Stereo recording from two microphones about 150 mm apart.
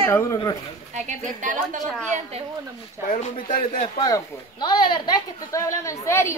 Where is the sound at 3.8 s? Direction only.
35° left (ahead or behind).